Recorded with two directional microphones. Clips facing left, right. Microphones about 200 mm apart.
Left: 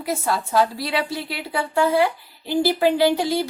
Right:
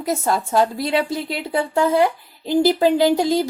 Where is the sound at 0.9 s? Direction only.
45° right (ahead or behind).